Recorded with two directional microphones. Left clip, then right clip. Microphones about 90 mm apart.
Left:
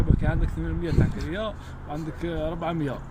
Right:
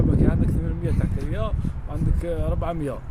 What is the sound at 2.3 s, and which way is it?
Speech, 90° right.